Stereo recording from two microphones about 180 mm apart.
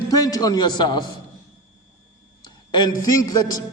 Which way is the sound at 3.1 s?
20° left (ahead or behind).